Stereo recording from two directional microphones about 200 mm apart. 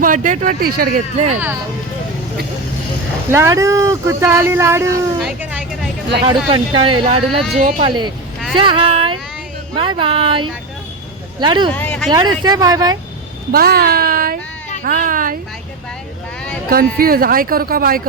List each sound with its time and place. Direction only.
0.0 s speech: 40° right (ahead or behind)
3.2 s speech: 15° right (ahead or behind)
6.2 s speech: 25° right (ahead or behind)
7.5 s speech: 40° right (ahead or behind)
7.8 s speech: 25° right (ahead or behind)
11.7 s speech: 10° left (ahead or behind)
12.3 s speech: 20° right (ahead or behind)
13.5 s a child's voice: 50° right (ahead or behind)
17.0 s speech: 45° right (ahead or behind)